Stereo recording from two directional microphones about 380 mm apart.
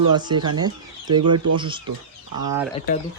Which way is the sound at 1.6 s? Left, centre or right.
Centre.